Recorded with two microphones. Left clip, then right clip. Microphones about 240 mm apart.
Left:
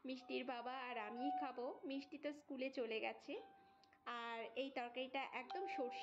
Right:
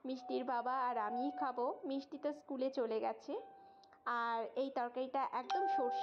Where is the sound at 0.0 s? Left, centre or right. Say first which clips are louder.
Right 7 dB; centre.